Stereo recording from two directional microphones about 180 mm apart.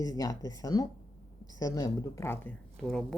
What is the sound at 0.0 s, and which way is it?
Speech, 20° left (ahead or behind).